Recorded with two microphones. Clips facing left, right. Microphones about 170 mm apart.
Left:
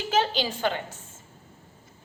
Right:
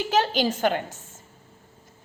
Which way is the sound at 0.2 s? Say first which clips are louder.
Right 3 dB; 45° right (ahead or behind).